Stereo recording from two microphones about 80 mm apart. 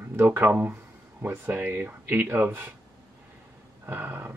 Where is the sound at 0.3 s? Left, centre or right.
Right.